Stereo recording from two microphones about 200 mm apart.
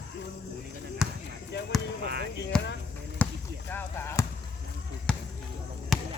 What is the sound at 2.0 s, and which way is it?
Chop, 50° right (ahead or behind).